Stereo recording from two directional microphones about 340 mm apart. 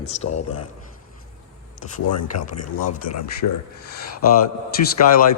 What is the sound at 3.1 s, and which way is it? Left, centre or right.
Speech, left.